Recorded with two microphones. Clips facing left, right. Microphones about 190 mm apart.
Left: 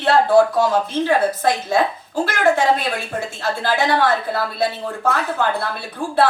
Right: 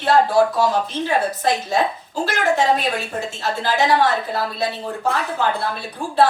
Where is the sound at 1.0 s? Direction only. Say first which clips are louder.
Left 2 dB; 55° left (ahead or behind).